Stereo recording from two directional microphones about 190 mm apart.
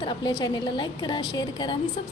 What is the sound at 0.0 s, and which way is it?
A woman's voice, 25° left (ahead or behind).